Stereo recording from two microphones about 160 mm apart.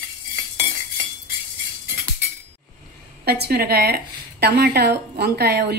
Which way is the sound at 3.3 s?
90° right.